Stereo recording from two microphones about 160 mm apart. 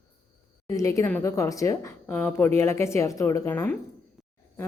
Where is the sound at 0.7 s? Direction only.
20° left (ahead or behind).